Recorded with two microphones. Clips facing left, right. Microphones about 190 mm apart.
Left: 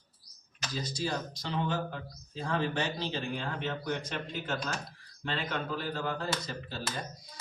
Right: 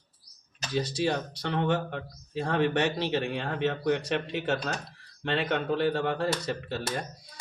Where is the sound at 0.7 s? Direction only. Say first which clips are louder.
Right 7 dB; 70° right (ahead or behind).